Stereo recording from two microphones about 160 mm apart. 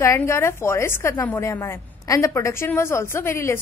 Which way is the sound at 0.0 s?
15° left (ahead or behind).